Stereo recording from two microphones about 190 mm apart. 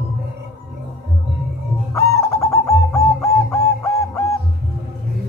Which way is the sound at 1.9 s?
15° left (ahead or behind).